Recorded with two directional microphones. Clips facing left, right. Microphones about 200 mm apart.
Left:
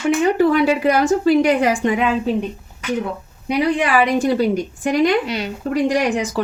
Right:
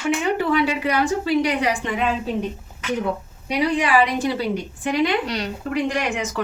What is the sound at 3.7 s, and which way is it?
Speech, 50° left (ahead or behind).